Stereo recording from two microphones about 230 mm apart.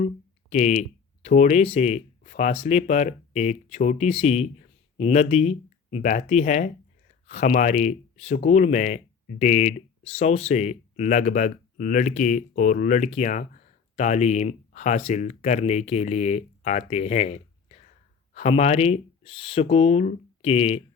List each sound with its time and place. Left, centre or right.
0.5 s speech: left